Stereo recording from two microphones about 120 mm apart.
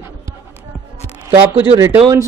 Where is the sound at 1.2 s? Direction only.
20° right (ahead or behind).